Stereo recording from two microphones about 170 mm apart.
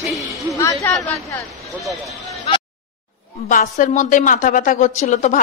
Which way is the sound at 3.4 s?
50° left (ahead or behind).